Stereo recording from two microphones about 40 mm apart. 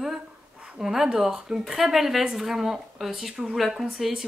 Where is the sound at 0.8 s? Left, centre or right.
Centre.